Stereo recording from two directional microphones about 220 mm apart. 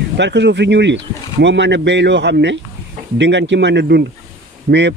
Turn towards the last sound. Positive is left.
turn(degrees=-50)  # may be behind; listen again after turning